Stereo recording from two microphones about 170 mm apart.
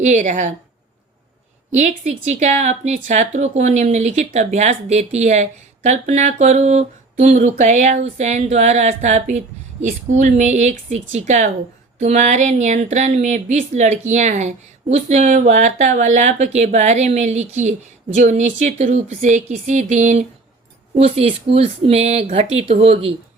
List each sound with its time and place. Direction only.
0.0 s speech: 45° right (ahead or behind)
1.7 s a woman's voice: 45° right (ahead or behind)